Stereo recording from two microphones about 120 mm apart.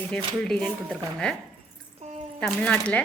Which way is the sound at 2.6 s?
10° left (ahead or behind).